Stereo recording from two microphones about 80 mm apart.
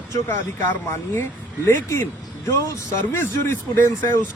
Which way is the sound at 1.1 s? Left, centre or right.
Left.